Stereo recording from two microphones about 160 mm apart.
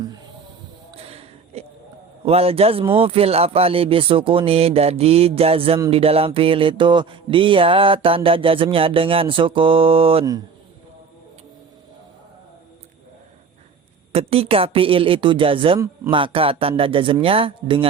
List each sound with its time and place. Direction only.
0.9 s a sound: 40° right (ahead or behind)
2.2 s mantra: 40° right (ahead or behind)
14.1 s mantra: 40° right (ahead or behind)